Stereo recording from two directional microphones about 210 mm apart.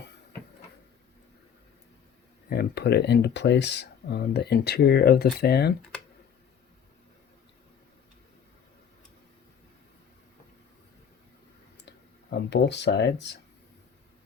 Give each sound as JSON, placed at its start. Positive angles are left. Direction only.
{"t": 2.5, "sound": "speech", "side_deg": 50}
{"t": 11.9, "sound": "speech", "side_deg": 55}